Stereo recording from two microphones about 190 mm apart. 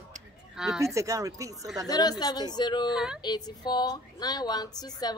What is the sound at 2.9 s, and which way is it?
Speech, 5° right (ahead or behind).